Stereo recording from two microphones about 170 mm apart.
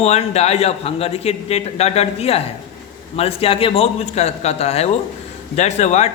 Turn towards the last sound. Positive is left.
turn(degrees=40)  # may be behind; listen again after turning